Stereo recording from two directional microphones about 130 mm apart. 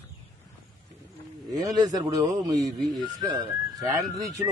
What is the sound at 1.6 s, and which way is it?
Speech, 30° right (ahead or behind).